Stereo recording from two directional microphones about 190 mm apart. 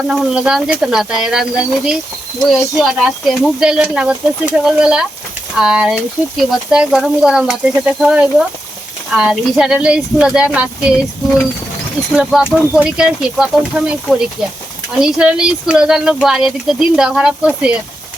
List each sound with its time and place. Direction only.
0.1 s speech: 5° right (ahead or behind)
12.1 s speech: 5° right (ahead or behind)